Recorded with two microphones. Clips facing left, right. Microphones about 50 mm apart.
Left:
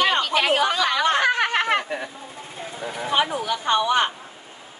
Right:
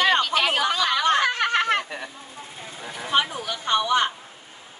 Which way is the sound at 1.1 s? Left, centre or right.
Centre.